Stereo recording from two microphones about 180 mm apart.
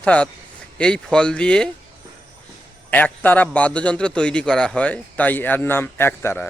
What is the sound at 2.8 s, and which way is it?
A man's voice, 10° left (ahead or behind).